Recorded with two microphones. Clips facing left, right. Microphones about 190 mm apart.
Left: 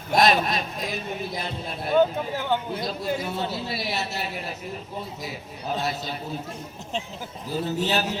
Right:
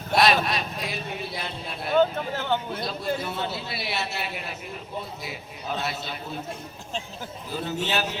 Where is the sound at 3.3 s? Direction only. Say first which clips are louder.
Left 2 dB; 40° left (ahead or behind).